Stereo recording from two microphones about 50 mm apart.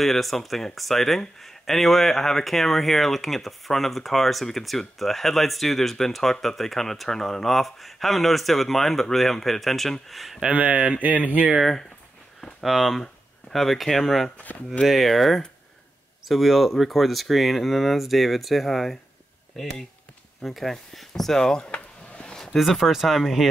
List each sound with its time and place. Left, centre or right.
0.0 s speech: centre
10.4 s speech: right
12.6 s speech: centre
21.6 s a sound: left
22.6 s speech: centre